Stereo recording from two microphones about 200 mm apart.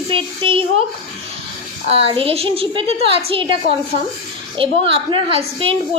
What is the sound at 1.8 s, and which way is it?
A woman's voice, 30° right (ahead or behind).